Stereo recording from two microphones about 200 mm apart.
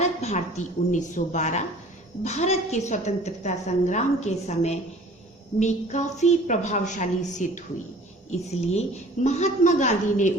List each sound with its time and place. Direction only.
0.0 s a woman's voice: 35° left (ahead or behind)